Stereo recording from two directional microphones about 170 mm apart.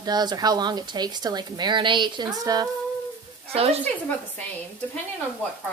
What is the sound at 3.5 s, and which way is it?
Speech, 35° right (ahead or behind).